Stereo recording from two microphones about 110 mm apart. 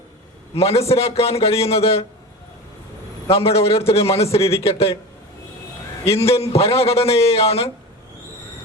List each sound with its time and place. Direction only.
0.5 s a man's voice: 65° left (ahead or behind)
3.2 s a man's voice: 65° left (ahead or behind)
6.1 s a man's voice: 60° left (ahead or behind)